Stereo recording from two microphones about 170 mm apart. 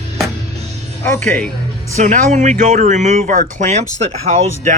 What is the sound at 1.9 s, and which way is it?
Speech, 45° right (ahead or behind).